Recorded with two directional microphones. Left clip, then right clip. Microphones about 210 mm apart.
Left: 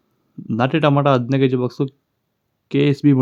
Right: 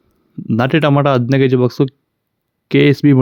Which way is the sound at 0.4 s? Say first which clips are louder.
Right 3 dB; 35° right (ahead or behind).